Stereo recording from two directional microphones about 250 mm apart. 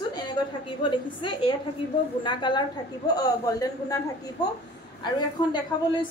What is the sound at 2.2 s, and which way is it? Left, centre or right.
A woman's voice, centre.